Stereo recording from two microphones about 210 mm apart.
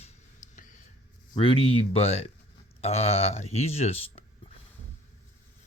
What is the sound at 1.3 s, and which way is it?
Speech, 25° left (ahead or behind).